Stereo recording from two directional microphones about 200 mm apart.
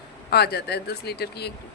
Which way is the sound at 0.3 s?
50° left (ahead or behind).